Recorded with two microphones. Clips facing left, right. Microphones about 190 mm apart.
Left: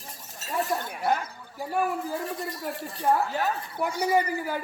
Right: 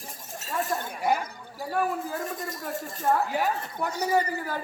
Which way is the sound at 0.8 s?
10° right (ahead or behind).